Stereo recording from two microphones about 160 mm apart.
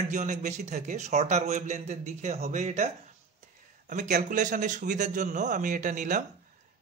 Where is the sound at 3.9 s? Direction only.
50° right (ahead or behind).